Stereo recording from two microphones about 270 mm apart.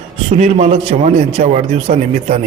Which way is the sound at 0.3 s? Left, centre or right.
Right.